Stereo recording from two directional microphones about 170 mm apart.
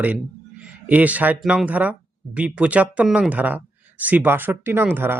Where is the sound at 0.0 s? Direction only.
5° right (ahead or behind).